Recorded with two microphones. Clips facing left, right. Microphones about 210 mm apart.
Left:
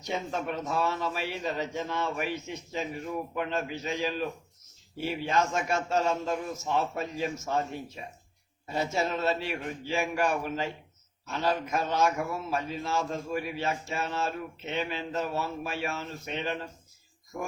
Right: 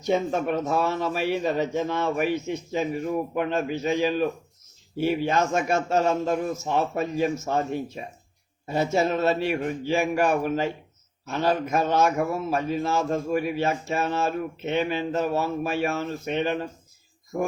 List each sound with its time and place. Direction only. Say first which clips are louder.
0.1 s a man's voice: right 9 dB; 55° right (ahead or behind)
8.6 s a man's voice: right 6 dB; 55° right (ahead or behind)